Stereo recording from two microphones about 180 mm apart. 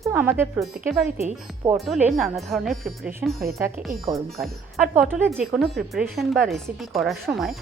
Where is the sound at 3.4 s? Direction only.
15° right (ahead or behind).